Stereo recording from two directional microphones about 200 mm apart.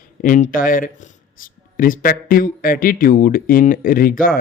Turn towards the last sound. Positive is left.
turn(degrees=45)  # may be behind; listen again after turning